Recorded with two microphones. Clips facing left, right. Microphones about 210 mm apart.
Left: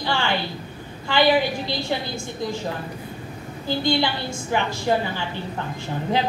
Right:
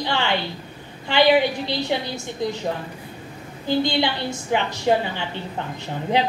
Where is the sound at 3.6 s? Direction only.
20° right (ahead or behind).